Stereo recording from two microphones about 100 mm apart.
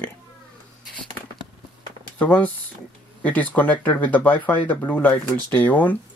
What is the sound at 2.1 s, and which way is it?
Speech, 15° left (ahead or behind).